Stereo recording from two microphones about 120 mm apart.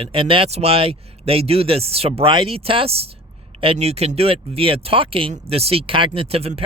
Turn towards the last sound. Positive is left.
turn(degrees=-55)  # may be behind; listen again after turning